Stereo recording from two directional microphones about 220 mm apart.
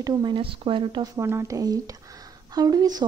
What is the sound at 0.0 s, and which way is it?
A woman's voice, 20° right (ahead or behind).